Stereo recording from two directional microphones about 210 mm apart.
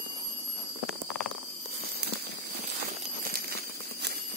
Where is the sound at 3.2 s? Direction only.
45° right (ahead or behind).